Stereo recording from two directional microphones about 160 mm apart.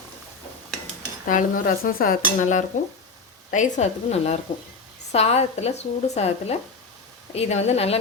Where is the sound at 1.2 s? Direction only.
60° left (ahead or behind).